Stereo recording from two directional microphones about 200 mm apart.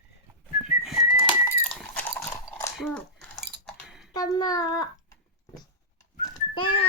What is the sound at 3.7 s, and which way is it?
Dishes, centre (ahead or behind).